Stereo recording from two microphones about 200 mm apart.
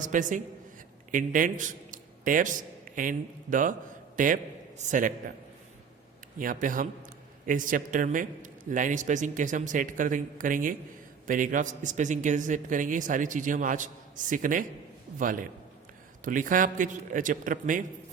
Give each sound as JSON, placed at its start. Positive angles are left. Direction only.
{"t": 0.0, "sound": "a man's voice", "side_deg": -40}
{"t": 6.4, "sound": "a man's voice", "side_deg": -40}